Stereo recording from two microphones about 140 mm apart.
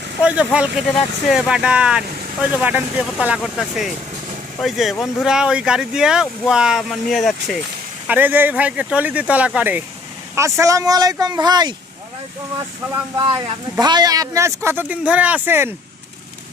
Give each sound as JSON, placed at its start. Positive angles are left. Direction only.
{"t": 0.2, "sound": "speech", "side_deg": -10}
{"t": 8.0, "sound": "speech", "side_deg": -10}
{"t": 10.3, "sound": "speech", "side_deg": -20}